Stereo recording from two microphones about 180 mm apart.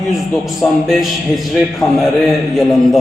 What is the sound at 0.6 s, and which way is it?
A man's voice, centre (ahead or behind).